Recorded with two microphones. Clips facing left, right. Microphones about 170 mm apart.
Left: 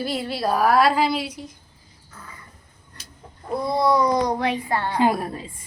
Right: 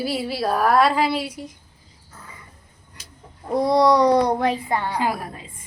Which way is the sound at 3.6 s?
80° right.